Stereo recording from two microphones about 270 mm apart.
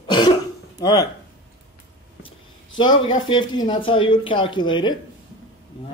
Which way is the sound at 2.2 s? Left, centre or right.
Centre.